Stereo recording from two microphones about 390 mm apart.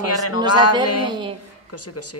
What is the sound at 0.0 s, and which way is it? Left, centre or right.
Speech, left.